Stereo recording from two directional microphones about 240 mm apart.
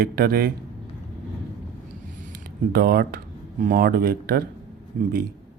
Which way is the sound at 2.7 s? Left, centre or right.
Right.